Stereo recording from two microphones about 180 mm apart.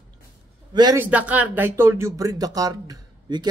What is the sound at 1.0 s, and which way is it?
Speech, 10° right (ahead or behind).